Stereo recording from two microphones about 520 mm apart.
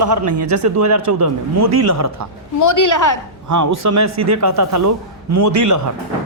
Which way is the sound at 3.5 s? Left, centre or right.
Right.